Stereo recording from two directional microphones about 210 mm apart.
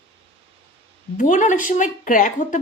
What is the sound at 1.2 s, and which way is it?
A woman's voice, 35° left (ahead or behind).